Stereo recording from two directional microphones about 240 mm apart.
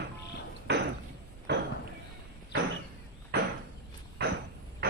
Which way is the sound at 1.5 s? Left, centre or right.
Right.